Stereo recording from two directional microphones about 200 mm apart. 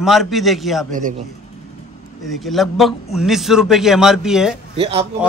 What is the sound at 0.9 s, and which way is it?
Speech, 40° right (ahead or behind).